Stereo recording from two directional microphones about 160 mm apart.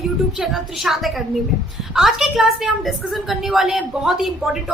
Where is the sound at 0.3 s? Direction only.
Centre (ahead or behind).